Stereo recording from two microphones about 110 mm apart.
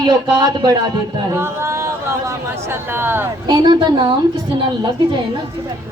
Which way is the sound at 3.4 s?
40° right (ahead or behind).